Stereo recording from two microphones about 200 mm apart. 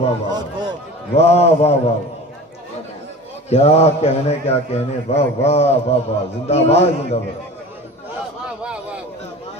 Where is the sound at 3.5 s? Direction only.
30° left (ahead or behind).